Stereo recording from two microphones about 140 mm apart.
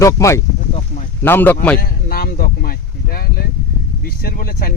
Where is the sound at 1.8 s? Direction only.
90° left.